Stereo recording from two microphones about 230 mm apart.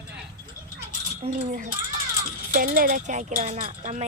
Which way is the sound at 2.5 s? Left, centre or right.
Right.